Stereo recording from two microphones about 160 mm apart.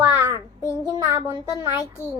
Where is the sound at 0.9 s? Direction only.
20° right (ahead or behind).